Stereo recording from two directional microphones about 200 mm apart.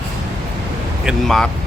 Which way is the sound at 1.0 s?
Centre (ahead or behind).